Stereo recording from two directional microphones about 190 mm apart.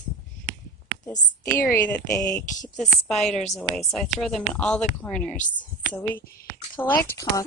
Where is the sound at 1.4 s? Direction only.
10° left (ahead or behind).